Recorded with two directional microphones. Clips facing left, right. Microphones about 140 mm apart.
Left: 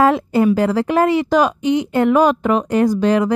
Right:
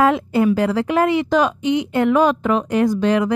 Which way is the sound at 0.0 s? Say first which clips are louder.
Left 2 dB; 40° left (ahead or behind).